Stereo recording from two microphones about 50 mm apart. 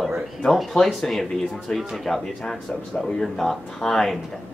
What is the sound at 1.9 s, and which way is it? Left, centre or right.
A man's voice, centre.